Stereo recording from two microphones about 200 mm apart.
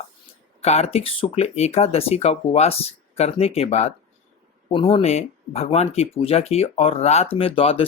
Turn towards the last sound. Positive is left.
turn(degrees=30)  # may be behind; listen again after turning